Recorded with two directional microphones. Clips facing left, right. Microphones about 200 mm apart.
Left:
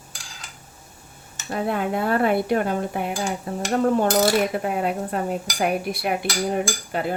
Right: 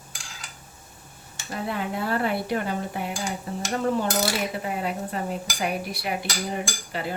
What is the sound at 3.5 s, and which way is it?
Stir, 60° left (ahead or behind).